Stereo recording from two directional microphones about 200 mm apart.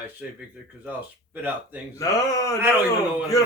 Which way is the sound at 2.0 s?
15° left (ahead or behind).